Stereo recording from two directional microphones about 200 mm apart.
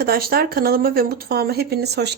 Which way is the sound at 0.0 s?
50° right (ahead or behind).